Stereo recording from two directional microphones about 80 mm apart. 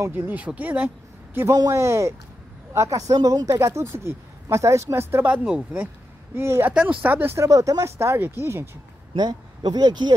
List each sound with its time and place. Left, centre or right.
0.1 s speech: right
1.5 s speech: right
1.8 s speech: right
5.2 s speech: centre
6.3 s speech: right
6.7 s speech: centre
7.3 s speech: right
9.1 s speech: right